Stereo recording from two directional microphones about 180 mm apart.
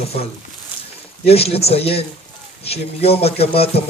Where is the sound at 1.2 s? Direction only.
35° left (ahead or behind).